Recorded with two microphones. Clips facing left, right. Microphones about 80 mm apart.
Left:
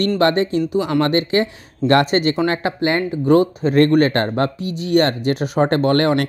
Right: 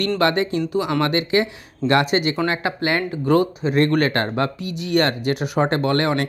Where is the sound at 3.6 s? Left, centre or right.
Left.